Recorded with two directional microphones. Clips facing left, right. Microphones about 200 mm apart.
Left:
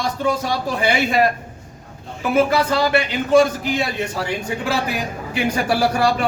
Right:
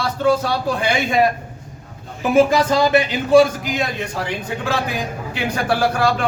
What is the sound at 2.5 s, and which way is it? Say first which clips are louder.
Speech: right 2 dB; 15° right (ahead or behind).